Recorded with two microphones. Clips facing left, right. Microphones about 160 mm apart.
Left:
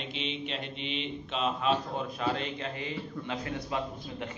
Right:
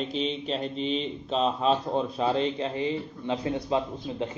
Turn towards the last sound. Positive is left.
turn(degrees=-25)  # may be behind; listen again after turning